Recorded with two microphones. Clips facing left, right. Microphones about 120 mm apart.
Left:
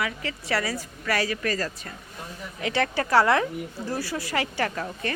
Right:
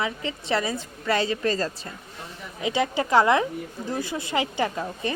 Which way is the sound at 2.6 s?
15° right (ahead or behind).